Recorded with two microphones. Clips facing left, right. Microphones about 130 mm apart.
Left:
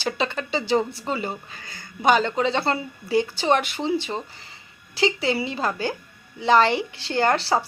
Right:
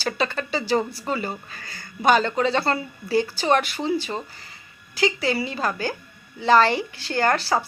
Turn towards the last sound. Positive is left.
turn(degrees=25)  # may be behind; listen again after turning